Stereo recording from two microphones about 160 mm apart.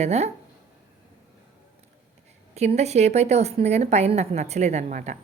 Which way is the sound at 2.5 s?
45° right (ahead or behind).